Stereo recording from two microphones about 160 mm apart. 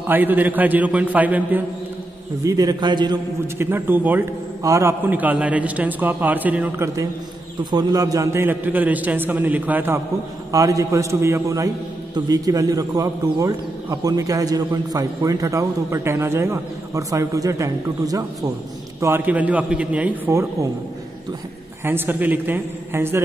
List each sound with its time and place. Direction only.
0.1 s a man's voice: 10° right (ahead or behind)
2.4 s a man's voice: 20° right (ahead or behind)
3.5 s a man's voice: 15° right (ahead or behind)
7.7 s a man's voice: 20° right (ahead or behind)
21.8 s a man's voice: 15° right (ahead or behind)